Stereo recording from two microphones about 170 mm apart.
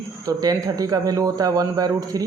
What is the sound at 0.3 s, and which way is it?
Speech, 20° right (ahead or behind).